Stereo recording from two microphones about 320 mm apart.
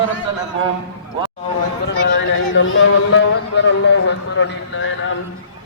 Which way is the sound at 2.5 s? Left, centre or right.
Left.